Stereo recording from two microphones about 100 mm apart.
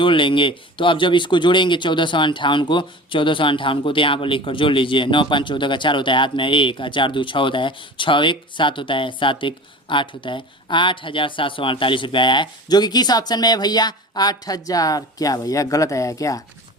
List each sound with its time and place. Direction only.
0.0 s speech: 55° left (ahead or behind); by 16.4 s 35° left (ahead or behind)